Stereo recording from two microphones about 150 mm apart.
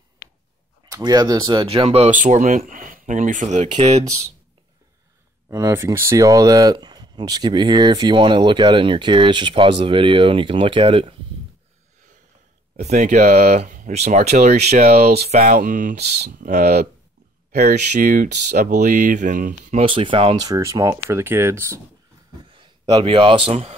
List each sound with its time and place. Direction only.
0.8 s speech: 25° right (ahead or behind)
1.7 s speech: 45° right (ahead or behind)
5.5 s speech: 20° right (ahead or behind); by 11.1 s 35° right (ahead or behind)
12.9 s speech: 50° right (ahead or behind)
13.4 s speech: 90° right; by 14.9 s 50° right (ahead or behind)
14.9 s speech: 90° right
15.3 s speech: 55° right (ahead or behind)
19.8 s speech: 35° right (ahead or behind)
20.4 s speech: 25° right (ahead or behind)
22.5 s a man's voice: 30° right (ahead or behind)